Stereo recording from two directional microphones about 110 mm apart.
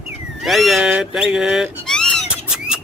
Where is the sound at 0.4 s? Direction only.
Centre (ahead or behind).